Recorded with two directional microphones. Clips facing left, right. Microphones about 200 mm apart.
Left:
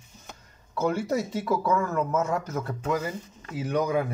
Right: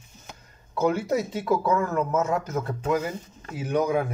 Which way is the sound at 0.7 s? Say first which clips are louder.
Right 2 dB; 15° right (ahead or behind).